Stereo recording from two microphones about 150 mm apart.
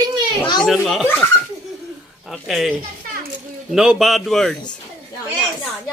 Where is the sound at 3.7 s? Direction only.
5° right (ahead or behind).